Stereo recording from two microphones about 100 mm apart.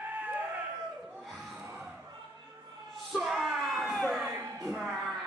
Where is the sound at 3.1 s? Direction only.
Centre (ahead or behind).